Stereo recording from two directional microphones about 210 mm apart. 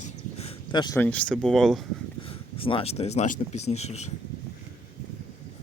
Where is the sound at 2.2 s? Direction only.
25° left (ahead or behind).